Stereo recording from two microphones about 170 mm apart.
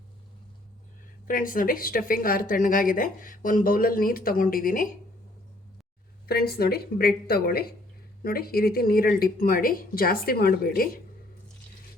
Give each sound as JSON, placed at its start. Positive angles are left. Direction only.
{"t": 1.3, "sound": "speech", "side_deg": 55}
{"t": 6.2, "sound": "speech", "side_deg": 65}